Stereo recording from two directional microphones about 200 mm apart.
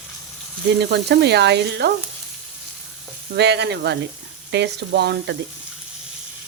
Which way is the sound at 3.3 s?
55° right (ahead or behind).